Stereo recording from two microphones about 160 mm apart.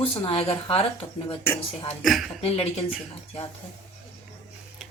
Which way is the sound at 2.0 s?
Centre (ahead or behind).